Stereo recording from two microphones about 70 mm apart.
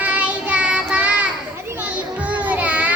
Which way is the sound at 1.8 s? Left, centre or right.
Right.